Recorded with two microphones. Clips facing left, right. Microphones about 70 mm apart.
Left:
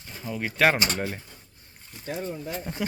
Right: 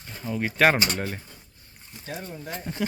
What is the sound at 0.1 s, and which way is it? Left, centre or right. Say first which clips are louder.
Speech: right 3 dB; centre.